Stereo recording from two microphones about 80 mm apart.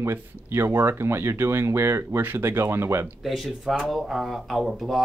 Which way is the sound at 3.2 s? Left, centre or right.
Centre.